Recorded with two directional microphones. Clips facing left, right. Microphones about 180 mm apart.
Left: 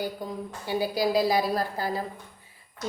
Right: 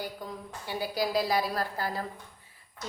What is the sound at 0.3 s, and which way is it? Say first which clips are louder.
A woman's voice: left 6 dB; 15° left (ahead or behind).